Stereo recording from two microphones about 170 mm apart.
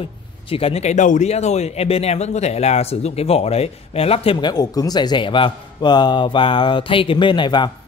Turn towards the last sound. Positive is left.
turn(degrees=25)  # may be behind; listen again after turning